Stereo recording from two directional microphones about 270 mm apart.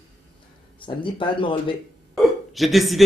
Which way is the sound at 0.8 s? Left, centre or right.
Centre.